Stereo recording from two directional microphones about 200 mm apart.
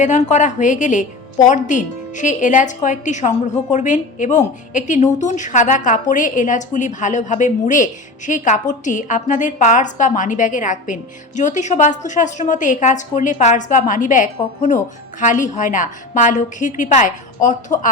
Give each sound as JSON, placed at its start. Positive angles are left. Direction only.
{"t": 0.0, "sound": "a woman's voice", "side_deg": 35}